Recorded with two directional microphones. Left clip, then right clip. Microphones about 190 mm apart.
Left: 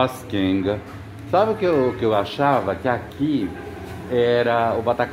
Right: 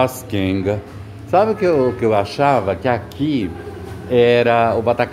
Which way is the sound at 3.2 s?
10° left (ahead or behind).